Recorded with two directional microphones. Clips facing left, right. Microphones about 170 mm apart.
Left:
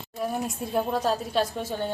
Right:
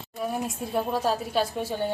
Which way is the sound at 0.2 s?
Centre (ahead or behind).